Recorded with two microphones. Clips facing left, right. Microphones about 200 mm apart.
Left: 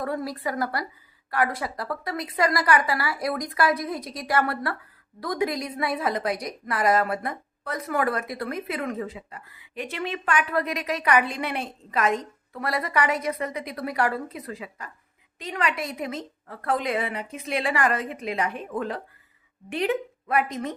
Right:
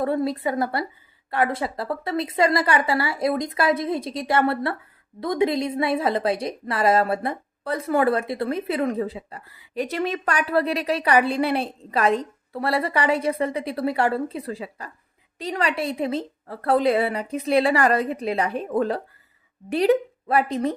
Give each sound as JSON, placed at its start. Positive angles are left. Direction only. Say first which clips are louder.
{"t": 0.0, "sound": "a woman's voice", "louder": "right 6 dB", "side_deg": -25}